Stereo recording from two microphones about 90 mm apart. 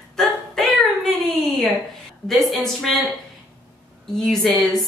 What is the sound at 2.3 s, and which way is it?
Speech, centre (ahead or behind).